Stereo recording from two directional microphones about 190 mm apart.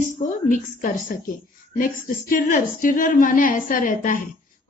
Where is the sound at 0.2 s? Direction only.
40° left (ahead or behind).